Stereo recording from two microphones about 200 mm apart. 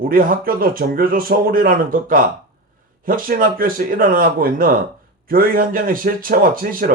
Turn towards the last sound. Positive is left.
turn(degrees=-45)  # may be behind; listen again after turning